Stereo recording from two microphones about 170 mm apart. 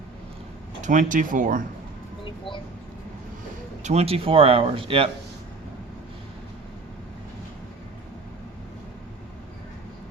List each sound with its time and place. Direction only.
0.8 s speech: 50° right (ahead or behind)
2.2 s a sound: 30° left (ahead or behind)
3.8 s speech: 35° right (ahead or behind)